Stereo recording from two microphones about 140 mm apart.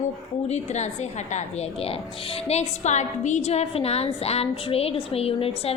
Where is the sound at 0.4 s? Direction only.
55° left (ahead or behind).